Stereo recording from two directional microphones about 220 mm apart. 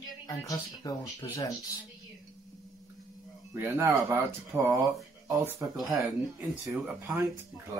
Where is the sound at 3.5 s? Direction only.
10° right (ahead or behind).